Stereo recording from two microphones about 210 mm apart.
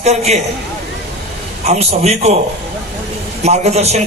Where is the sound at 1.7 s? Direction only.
30° right (ahead or behind).